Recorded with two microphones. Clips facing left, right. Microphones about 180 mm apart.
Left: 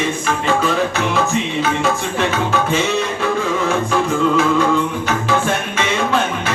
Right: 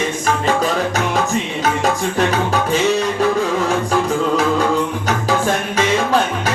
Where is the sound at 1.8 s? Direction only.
40° right (ahead or behind).